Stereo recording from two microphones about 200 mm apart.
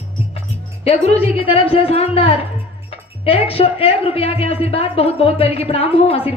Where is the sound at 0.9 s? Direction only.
30° left (ahead or behind).